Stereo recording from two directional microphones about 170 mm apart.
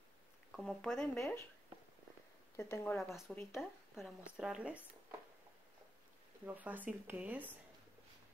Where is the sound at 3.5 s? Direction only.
Centre (ahead or behind).